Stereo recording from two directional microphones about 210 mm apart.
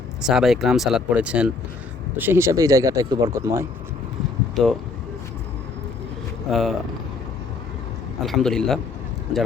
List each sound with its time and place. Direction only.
0.3 s speech: centre (ahead or behind)
4.6 s speech: centre (ahead or behind)
6.5 s speech: centre (ahead or behind)
8.2 s speech: centre (ahead or behind)